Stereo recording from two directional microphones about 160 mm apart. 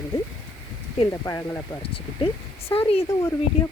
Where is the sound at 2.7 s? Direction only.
35° left (ahead or behind).